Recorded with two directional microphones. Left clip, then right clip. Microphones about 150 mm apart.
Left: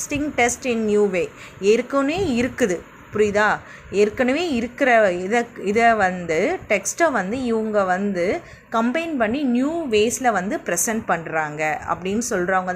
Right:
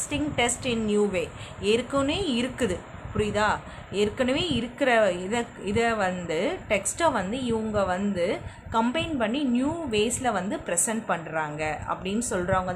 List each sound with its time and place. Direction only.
0.1 s a woman's voice: 30° left (ahead or behind)